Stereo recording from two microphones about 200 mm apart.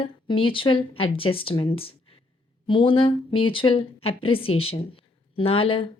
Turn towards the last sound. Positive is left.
turn(degrees=25)  # may be behind; listen again after turning